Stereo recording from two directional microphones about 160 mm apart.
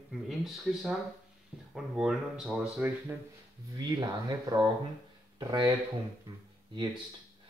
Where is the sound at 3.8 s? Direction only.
25° right (ahead or behind).